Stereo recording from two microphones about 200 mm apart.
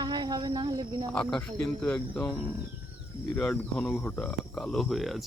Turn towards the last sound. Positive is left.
turn(degrees=0)  # may be behind; listen again after turning